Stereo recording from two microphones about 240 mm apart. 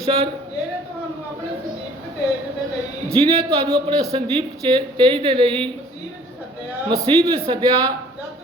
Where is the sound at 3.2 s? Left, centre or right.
Right.